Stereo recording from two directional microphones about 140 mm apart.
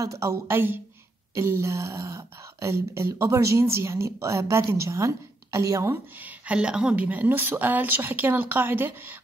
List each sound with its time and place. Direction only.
0.0 s speech: 20° right (ahead or behind)
6.4 s speech: 5° right (ahead or behind)